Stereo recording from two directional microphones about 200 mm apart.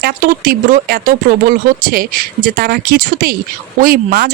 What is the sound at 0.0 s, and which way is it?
Speech, 45° right (ahead or behind).